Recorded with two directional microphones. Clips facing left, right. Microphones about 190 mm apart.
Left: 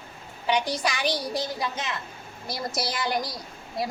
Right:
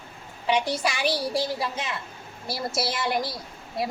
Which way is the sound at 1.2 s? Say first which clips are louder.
Right 3 dB; 30° right (ahead or behind).